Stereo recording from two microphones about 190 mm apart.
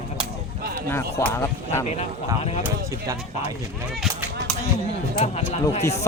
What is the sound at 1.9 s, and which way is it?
Speech, 35° left (ahead or behind).